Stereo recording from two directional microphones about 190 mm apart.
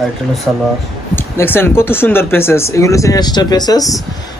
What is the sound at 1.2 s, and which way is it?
Speech, 10° left (ahead or behind).